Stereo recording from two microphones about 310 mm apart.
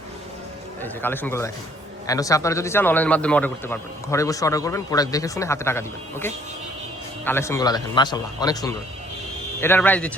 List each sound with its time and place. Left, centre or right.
0.8 s a man's voice: centre